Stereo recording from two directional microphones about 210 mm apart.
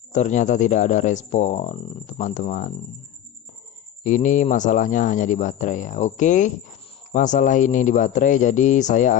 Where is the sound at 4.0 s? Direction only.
35° left (ahead or behind).